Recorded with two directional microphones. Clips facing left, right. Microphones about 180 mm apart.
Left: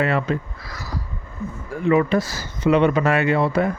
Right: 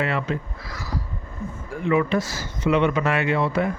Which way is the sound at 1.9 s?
40° left (ahead or behind).